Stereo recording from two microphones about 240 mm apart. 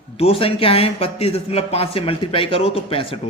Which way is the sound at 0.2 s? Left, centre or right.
Left.